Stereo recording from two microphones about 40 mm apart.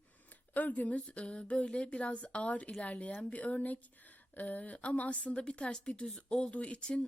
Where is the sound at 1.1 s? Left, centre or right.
Left.